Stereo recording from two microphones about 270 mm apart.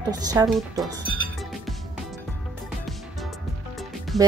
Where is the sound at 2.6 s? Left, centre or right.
Centre.